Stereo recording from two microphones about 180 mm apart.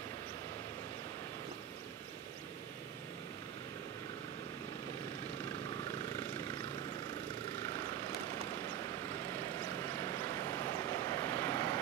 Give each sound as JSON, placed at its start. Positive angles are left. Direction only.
{"t": 6.4, "sound": "vehicle", "side_deg": 25}
{"t": 9.8, "sound": "vehicle", "side_deg": 15}